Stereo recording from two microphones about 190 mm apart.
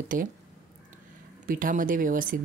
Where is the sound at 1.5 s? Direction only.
45° right (ahead or behind).